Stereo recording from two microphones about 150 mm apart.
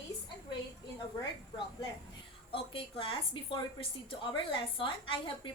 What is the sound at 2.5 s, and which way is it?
A woman's voice, 35° left (ahead or behind).